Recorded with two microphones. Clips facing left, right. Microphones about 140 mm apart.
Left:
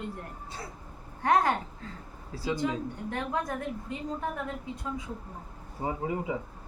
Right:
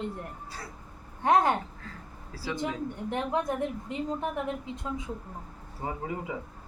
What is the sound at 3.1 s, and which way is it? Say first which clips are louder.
Speech: right 3 dB; 20° right (ahead or behind).